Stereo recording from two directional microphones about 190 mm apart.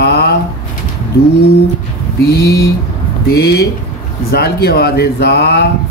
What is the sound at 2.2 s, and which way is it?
Speech, 55° left (ahead or behind).